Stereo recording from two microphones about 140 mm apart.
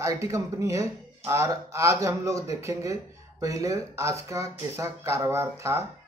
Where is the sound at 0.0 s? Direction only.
20° right (ahead or behind).